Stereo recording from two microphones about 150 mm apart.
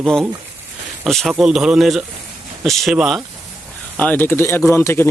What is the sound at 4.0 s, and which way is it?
Speech, 10° left (ahead or behind).